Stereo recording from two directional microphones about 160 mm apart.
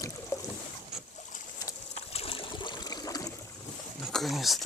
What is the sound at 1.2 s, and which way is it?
Boat, 50° left (ahead or behind).